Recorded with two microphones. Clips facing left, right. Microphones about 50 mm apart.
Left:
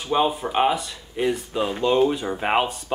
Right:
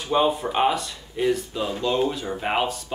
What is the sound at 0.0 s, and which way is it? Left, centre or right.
Speech, centre.